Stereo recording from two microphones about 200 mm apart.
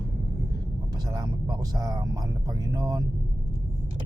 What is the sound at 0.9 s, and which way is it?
Speech, 20° right (ahead or behind).